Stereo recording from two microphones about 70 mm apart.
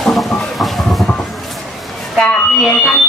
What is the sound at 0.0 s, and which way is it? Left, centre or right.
Music, centre.